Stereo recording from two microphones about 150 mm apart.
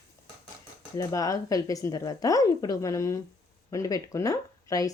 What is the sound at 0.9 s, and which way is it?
A woman's voice, 20° left (ahead or behind).